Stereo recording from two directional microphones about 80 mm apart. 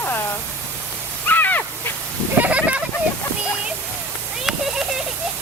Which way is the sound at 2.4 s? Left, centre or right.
Centre.